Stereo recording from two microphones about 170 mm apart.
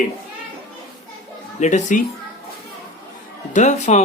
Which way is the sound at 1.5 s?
45° left (ahead or behind).